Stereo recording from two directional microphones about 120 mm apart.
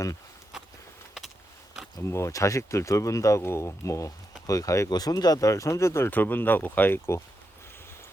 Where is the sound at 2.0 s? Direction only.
25° left (ahead or behind).